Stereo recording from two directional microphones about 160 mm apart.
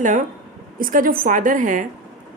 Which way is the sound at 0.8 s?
60° right (ahead or behind).